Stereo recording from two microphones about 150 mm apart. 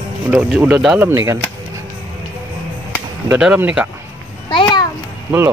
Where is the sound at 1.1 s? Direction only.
20° right (ahead or behind).